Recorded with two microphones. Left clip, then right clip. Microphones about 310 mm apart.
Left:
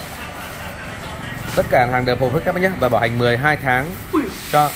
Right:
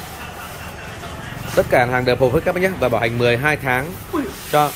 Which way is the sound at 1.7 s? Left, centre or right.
Centre.